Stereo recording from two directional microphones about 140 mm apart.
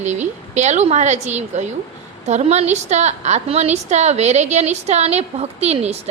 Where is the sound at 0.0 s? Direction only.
55° right (ahead or behind).